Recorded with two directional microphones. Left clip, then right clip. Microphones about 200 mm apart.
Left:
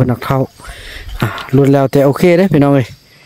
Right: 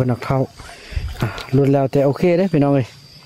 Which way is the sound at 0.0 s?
20° left (ahead or behind).